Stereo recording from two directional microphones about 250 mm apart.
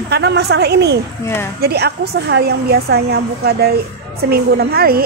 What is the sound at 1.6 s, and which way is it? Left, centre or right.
A woman's voice, right.